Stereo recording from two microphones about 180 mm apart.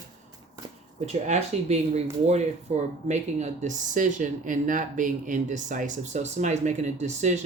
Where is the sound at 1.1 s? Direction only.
40° right (ahead or behind).